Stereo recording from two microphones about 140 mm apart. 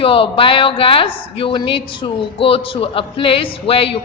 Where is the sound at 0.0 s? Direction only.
40° left (ahead or behind).